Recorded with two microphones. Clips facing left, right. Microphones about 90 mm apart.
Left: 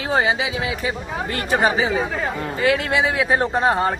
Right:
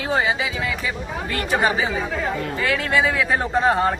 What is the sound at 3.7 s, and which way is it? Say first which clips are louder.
Speech: even; 5° left (ahead or behind).